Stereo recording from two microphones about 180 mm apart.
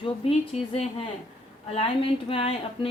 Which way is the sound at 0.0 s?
30° left (ahead or behind).